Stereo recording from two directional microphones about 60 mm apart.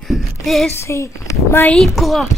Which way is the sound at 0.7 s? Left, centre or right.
Left.